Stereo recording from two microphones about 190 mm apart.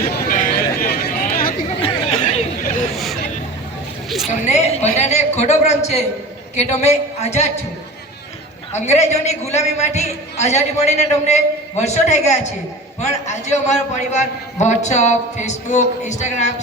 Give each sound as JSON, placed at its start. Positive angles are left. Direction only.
{"t": 0.3, "sound": "chatter", "side_deg": 45}
{"t": 1.8, "sound": "chatter", "side_deg": 30}
{"t": 2.9, "sound": "hubbub", "side_deg": 0}
{"t": 4.3, "sound": "a sound", "side_deg": 35}
{"t": 6.6, "sound": "a man's voice", "side_deg": 35}
{"t": 8.7, "sound": "a man's voice", "side_deg": 35}